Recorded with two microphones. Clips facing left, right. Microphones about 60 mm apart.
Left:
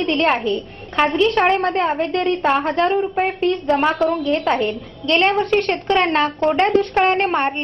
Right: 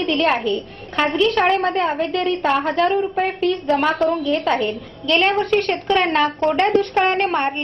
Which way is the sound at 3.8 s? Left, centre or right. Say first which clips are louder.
Left 1 dB; centre.